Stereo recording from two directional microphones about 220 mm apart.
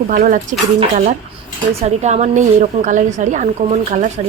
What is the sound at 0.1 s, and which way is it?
Speech, 35° right (ahead or behind).